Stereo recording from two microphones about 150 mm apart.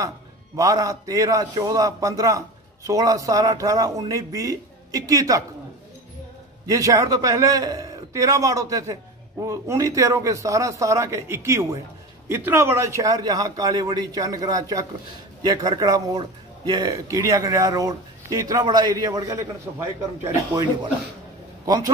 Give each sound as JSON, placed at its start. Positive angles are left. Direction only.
{"t": 0.6, "sound": "a man's voice", "side_deg": -20}
{"t": 6.7, "sound": "a man's voice", "side_deg": -20}
{"t": 21.6, "sound": "a man's voice", "side_deg": -25}